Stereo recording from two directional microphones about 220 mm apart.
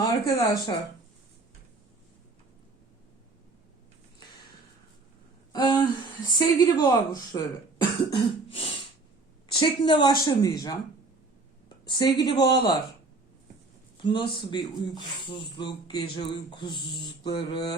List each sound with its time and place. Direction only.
0.0 s a woman's voice: 15° left (ahead or behind)
5.5 s a woman's voice: 20° left (ahead or behind)
11.9 s a woman's voice: 20° left (ahead or behind)
14.0 s speech: 20° left (ahead or behind)